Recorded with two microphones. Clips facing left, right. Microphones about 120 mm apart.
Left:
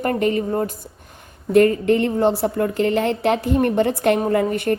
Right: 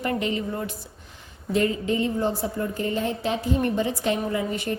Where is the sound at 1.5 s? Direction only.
60° left (ahead or behind).